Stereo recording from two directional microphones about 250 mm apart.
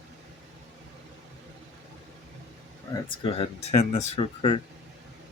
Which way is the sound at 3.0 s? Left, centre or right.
Left.